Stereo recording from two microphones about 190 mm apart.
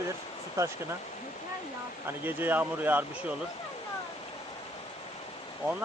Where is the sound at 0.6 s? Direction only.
15° right (ahead or behind).